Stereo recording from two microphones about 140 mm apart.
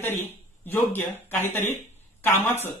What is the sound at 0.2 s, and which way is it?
A man's voice, 15° left (ahead or behind).